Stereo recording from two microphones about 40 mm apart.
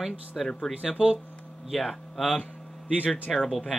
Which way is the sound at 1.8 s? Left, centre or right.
Centre.